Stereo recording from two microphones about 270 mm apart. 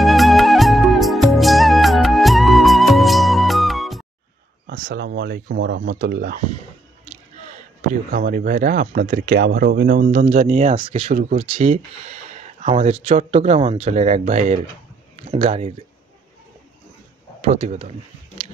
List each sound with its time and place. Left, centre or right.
0.0 s music: centre
4.6 s speech: right
7.9 s speech: right
17.4 s speech: right